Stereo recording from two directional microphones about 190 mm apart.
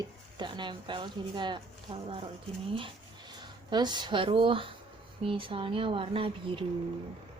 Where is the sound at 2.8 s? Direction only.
25° right (ahead or behind).